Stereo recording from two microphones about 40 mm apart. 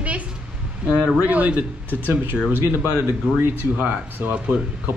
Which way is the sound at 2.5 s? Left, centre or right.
Right.